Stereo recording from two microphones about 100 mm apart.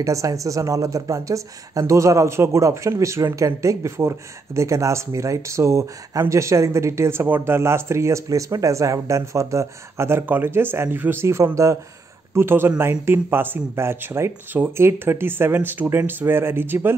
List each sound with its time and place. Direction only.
0.0 s speech: 35° right (ahead or behind)